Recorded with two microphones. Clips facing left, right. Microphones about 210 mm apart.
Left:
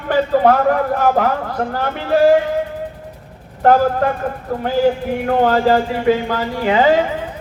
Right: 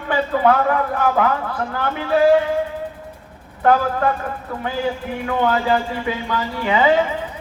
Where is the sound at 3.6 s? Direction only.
45° left (ahead or behind).